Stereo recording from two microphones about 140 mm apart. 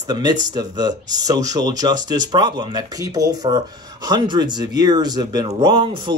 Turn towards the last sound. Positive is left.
turn(degrees=-35)  # may be behind; listen again after turning